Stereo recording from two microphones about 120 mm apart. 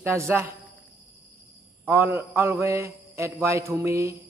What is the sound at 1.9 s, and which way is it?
A man's voice, 20° right (ahead or behind).